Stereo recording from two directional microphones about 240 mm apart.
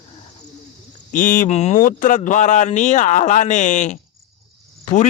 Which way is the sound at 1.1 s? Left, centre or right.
Left.